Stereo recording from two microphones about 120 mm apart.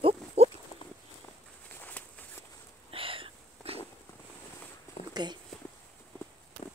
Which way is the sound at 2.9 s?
50° right (ahead or behind).